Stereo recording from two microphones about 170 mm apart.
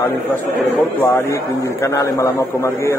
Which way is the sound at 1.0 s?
15° left (ahead or behind).